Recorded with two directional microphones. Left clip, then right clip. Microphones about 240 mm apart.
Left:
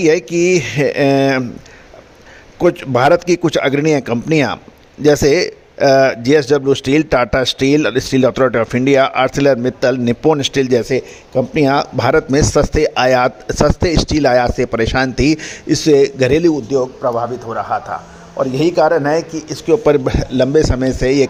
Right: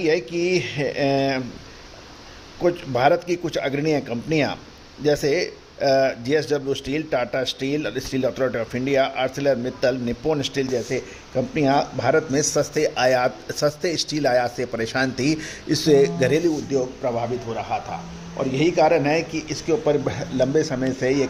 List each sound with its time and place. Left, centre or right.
0.0 s speech: left
2.6 s a man's voice: left